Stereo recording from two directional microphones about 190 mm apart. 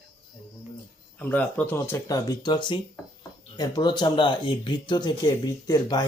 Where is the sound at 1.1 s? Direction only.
10° left (ahead or behind).